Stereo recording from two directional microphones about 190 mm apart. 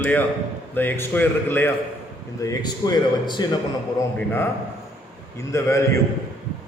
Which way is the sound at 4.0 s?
10° left (ahead or behind).